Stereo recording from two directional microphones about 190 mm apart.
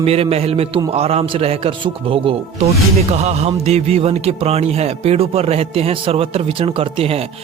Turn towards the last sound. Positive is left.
turn(degrees=-30)  # may be behind; listen again after turning